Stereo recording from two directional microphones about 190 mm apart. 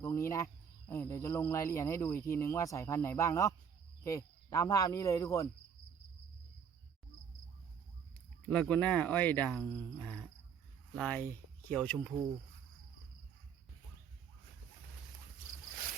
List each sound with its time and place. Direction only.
0.0 s speech: 15° left (ahead or behind)
8.4 s speech: 5° left (ahead or behind)